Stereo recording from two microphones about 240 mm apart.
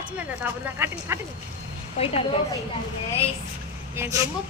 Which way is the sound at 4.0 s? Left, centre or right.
Centre.